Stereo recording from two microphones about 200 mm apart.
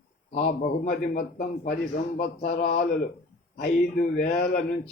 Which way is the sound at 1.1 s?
45° left (ahead or behind).